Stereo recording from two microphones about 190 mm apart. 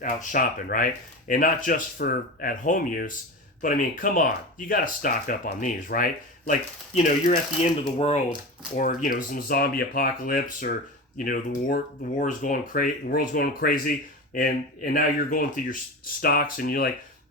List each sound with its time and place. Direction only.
0.0 s speech: 45° left (ahead or behind)
8.8 s speech: 45° left (ahead or behind)